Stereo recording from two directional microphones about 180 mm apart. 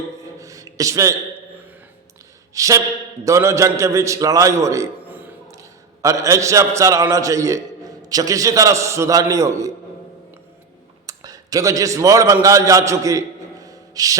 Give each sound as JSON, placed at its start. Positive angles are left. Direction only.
{"t": 0.3, "sound": "a sound", "side_deg": -20}
{"t": 2.6, "sound": "a man's voice", "side_deg": -20}
{"t": 11.0, "sound": "a man's voice", "side_deg": -20}